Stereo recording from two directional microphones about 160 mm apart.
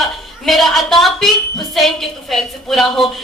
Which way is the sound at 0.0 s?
Centre (ahead or behind).